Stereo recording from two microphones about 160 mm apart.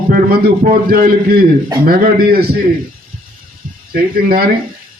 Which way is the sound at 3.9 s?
70° right (ahead or behind).